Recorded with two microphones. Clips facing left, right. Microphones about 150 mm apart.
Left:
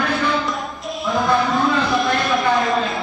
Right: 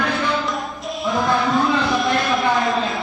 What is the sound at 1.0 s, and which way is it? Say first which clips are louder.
Music: left 1 dB; centre (ahead or behind).